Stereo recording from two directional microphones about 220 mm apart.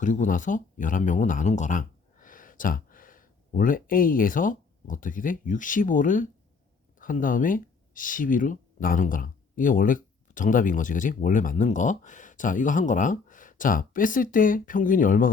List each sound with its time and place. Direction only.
0.0 s speech: 35° left (ahead or behind)